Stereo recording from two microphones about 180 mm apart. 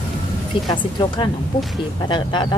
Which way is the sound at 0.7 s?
25° left (ahead or behind).